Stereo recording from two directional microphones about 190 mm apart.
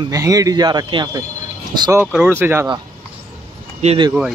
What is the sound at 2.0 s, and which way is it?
Speech, 10° right (ahead or behind).